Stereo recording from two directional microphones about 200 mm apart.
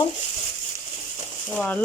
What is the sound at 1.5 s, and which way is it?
Speech, 5° left (ahead or behind).